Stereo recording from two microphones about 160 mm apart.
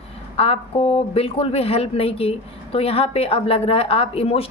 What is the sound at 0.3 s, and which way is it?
Speech, 40° left (ahead or behind).